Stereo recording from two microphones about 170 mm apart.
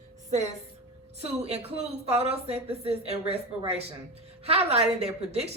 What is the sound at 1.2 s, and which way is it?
A woman's voice, 35° right (ahead or behind).